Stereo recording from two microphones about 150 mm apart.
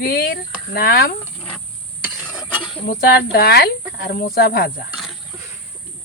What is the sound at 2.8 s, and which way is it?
Speech, 85° left.